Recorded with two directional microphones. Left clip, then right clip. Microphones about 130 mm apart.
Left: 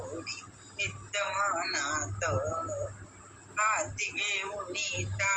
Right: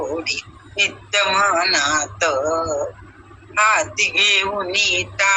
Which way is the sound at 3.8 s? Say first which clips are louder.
Right 15 dB; 90° right.